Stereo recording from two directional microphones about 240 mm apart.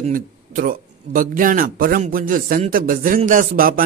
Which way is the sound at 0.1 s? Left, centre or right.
Right.